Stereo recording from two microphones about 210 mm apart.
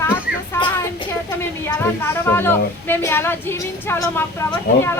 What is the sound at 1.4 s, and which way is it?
A woman's voice, 10° left (ahead or behind).